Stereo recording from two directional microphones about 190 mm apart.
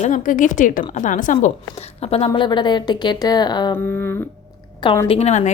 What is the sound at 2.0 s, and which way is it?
Speech, 30° left (ahead or behind).